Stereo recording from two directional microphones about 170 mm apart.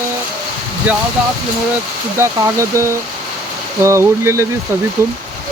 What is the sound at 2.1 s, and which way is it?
Speech, 15° right (ahead or behind).